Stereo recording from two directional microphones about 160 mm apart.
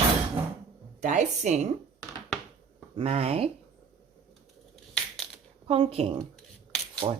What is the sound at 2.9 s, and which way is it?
Speech, 40° right (ahead or behind).